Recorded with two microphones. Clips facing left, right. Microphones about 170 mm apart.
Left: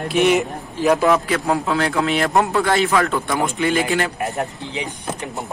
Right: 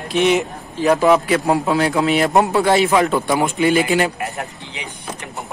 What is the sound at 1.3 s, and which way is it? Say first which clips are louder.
Speech: right 3 dB; 15° right (ahead or behind).